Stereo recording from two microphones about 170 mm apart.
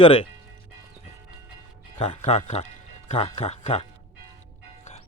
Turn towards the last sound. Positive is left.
turn(degrees=40)  # may be behind; listen again after turning